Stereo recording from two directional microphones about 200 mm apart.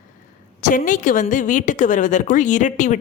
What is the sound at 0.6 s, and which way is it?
A woman's voice, 40° left (ahead or behind).